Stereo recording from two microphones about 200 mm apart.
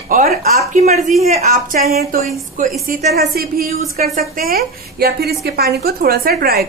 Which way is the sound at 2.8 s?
40° right (ahead or behind).